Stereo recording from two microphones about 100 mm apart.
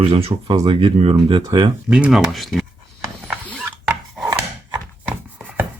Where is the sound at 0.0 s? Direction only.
70° right (ahead or behind).